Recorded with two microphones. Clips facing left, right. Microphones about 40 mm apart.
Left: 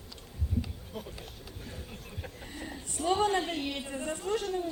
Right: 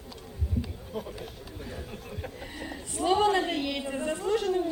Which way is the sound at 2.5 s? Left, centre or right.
Right.